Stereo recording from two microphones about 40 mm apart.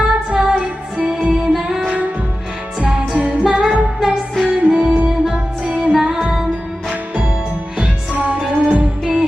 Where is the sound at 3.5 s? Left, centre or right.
Centre.